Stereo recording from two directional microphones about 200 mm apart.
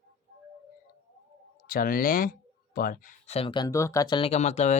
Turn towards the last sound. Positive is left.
turn(degrees=35)  # may be behind; listen again after turning